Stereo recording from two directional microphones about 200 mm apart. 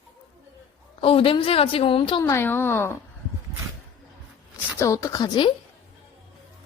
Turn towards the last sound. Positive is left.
turn(degrees=20)  # may be behind; listen again after turning